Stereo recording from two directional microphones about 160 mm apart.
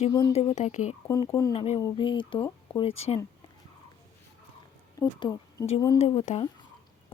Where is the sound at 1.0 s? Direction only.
20° left (ahead or behind).